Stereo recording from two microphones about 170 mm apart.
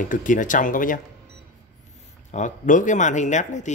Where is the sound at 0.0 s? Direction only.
50° left (ahead or behind).